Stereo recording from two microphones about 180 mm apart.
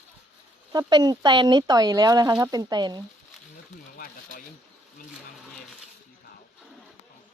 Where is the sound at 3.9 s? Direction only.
50° left (ahead or behind).